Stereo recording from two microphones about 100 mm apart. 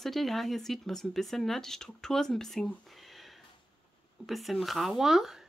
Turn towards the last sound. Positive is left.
turn(degrees=-5)  # may be behind; listen again after turning